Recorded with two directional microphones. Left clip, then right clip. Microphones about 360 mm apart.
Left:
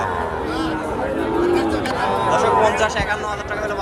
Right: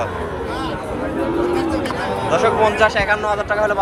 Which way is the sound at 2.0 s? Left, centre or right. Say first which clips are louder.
Even; centre.